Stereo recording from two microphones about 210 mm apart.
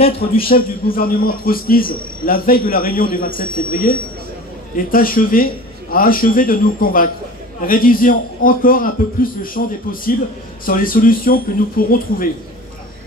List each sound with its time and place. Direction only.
0.0 s a man's voice: 25° left (ahead or behind)
0.4 s a man's voice: 45° left (ahead or behind)